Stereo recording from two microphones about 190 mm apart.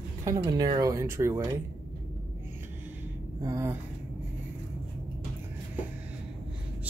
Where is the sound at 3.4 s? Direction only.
15° right (ahead or behind).